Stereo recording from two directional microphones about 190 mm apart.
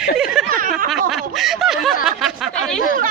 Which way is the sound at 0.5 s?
45° right (ahead or behind).